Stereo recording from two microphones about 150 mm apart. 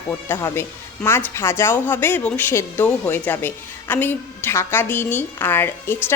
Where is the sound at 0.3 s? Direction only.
15° left (ahead or behind).